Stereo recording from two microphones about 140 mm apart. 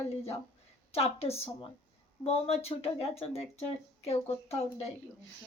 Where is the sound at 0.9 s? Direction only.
45° left (ahead or behind).